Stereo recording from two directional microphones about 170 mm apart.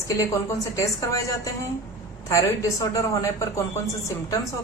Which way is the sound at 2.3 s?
20° left (ahead or behind).